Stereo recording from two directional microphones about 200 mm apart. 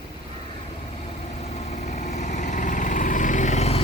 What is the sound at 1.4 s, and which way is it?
Vehicle, 30° left (ahead or behind).